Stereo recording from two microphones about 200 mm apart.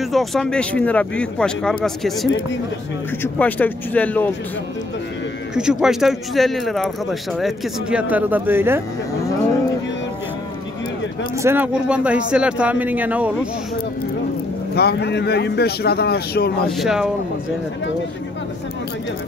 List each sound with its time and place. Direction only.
0.0 s speech: centre (ahead or behind)
5.5 s speech: 5° right (ahead or behind)
11.3 s speech: 10° right (ahead or behind)
14.8 s a man's voice: 55° left (ahead or behind)
16.6 s speech: centre (ahead or behind)